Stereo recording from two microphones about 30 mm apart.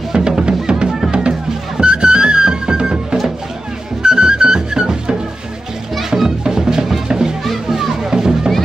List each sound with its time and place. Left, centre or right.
0.1 s music: right
6.0 s children playing: centre
6.4 s music: right
7.4 s music: centre
8.1 s music: centre